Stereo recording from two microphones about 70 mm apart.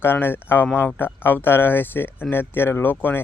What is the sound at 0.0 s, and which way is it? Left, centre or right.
Speech, left.